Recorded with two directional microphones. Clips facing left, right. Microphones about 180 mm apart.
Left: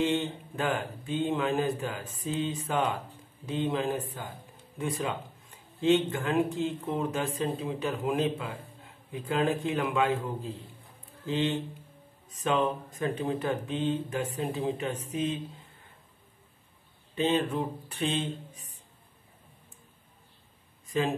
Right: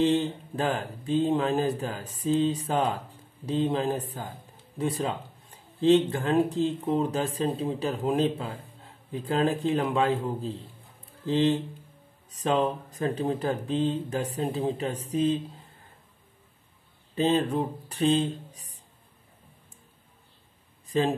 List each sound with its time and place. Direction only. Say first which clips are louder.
0.0 s speech: right 4 dB; 35° right (ahead or behind)
17.1 s speech: right 3 dB; 35° right (ahead or behind)
20.9 s speech: right 3 dB; 35° right (ahead or behind)